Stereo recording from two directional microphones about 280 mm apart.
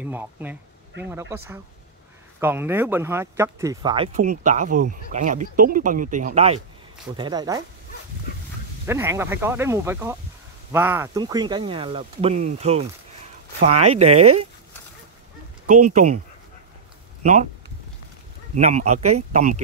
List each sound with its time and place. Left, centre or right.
0.0 s speech: centre
2.4 s speech: centre
8.8 s speech: centre
17.2 s speech: right
18.6 s speech: right